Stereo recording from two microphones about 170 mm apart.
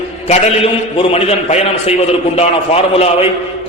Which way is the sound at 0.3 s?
35° left (ahead or behind).